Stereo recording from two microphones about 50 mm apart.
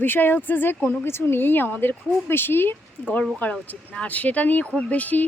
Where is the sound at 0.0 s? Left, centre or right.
Left.